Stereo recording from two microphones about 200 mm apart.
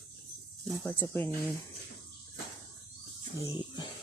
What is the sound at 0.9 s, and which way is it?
Speech, 10° left (ahead or behind).